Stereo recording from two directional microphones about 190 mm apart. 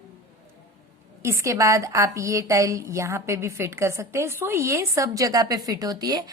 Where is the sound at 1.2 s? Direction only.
15° right (ahead or behind).